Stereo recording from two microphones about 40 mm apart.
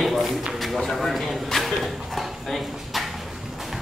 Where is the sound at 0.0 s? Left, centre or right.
Centre.